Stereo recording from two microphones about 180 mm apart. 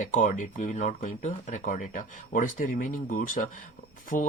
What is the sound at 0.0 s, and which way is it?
Speech, 45° left (ahead or behind).